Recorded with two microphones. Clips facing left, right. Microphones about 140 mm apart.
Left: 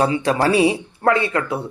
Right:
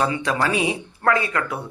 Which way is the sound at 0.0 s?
35° left (ahead or behind).